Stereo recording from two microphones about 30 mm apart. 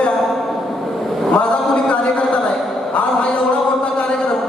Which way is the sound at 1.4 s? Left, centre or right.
Left.